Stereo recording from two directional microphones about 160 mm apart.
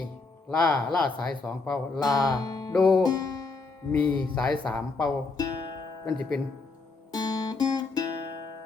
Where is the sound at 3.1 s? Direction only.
25° left (ahead or behind).